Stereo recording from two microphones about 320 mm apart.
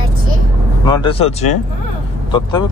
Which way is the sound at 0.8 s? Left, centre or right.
Centre.